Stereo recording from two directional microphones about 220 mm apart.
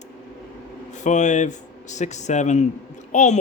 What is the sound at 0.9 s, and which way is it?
A woman's voice, 35° left (ahead or behind).